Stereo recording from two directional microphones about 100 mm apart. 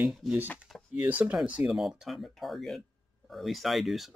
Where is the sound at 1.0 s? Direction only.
15° right (ahead or behind).